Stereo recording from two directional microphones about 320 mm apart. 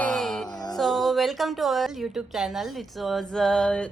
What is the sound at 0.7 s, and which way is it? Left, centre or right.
A woman's voice, centre.